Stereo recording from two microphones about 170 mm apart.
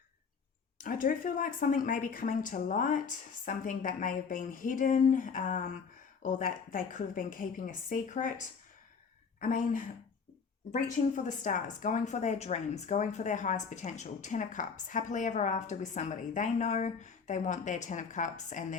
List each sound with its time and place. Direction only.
0.9 s a woman's voice: 55° left (ahead or behind)
9.4 s a woman's voice: 55° left (ahead or behind)